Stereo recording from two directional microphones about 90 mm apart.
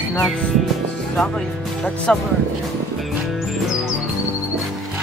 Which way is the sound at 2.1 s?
10° left (ahead or behind).